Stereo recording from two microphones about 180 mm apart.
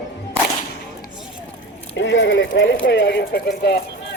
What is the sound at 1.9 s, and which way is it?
Speech, 80° left.